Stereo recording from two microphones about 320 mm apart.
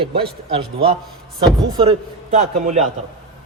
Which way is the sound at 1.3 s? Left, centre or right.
Centre.